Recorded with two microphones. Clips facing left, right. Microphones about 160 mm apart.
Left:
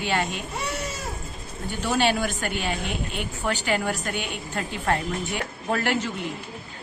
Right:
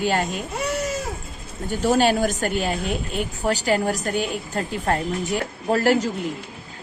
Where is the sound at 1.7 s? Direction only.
40° right (ahead or behind).